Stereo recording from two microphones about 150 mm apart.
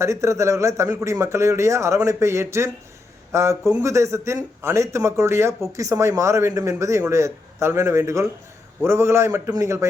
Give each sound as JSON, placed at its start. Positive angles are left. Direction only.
{"t": 0.0, "sound": "speech", "side_deg": -20}